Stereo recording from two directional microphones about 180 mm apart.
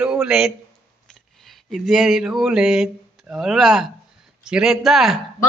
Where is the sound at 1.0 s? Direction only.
5° left (ahead or behind).